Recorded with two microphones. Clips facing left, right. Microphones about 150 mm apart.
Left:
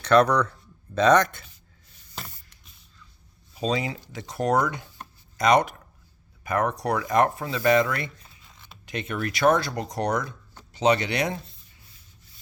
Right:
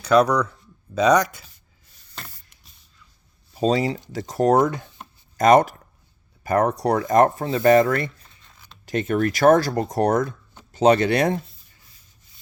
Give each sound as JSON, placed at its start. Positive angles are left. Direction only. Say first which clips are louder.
{"t": 0.0, "sound": "speech", "louder": "right 2 dB", "side_deg": -10}
{"t": 3.5, "sound": "speech", "louder": "right 6 dB", "side_deg": -45}
{"t": 8.4, "sound": "zipper", "louder": "even", "side_deg": 5}
{"t": 8.9, "sound": "speech", "louder": "right 8 dB", "side_deg": -45}